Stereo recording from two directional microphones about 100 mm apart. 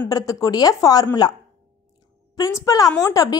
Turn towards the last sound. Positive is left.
turn(degrees=35)  # may be behind; listen again after turning